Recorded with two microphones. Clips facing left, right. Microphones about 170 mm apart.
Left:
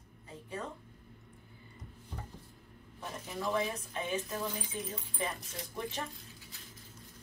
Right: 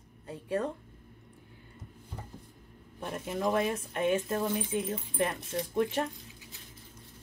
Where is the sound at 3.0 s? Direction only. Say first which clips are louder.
Right 6 dB; 60° right (ahead or behind).